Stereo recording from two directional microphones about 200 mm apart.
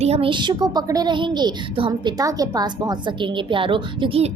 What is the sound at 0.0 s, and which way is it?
A woman's voice, 30° right (ahead or behind).